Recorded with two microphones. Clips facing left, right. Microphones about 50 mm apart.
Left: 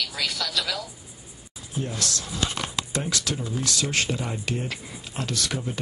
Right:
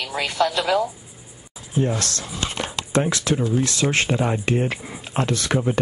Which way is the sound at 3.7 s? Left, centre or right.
Right.